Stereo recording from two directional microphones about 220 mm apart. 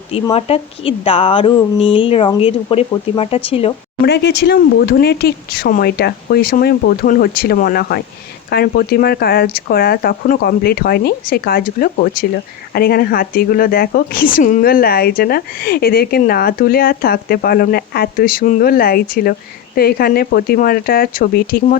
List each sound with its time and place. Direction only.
0.1 s a woman's voice: 25° left (ahead or behind)
4.0 s speech: 50° left (ahead or behind)